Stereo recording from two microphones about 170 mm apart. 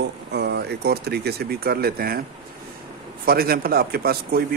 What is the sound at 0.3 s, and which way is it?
Speech, 80° right.